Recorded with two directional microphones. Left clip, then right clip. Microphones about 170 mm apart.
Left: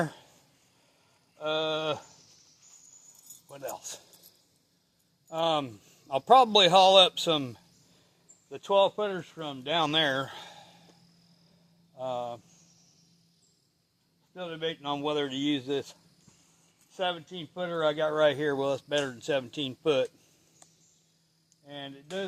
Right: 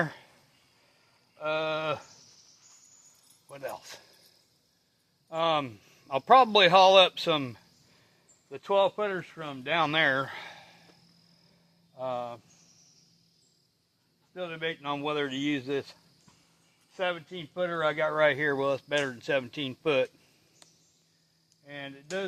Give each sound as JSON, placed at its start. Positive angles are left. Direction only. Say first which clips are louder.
{"t": 0.0, "sound": "a sound", "louder": "right 1 dB", "side_deg": -20}
{"t": 1.4, "sound": "speech", "louder": "even", "side_deg": -20}
{"t": 3.5, "sound": "speech", "louder": "even", "side_deg": -20}
{"t": 5.3, "sound": "a man's voice", "louder": "right 1 dB", "side_deg": -25}
{"t": 11.9, "sound": "speech", "louder": "even", "side_deg": -20}
{"t": 14.3, "sound": "speech", "louder": "even", "side_deg": -20}
{"t": 17.0, "sound": "speech", "louder": "even", "side_deg": -20}
{"t": 21.6, "sound": "speech", "louder": "right 1 dB", "side_deg": -20}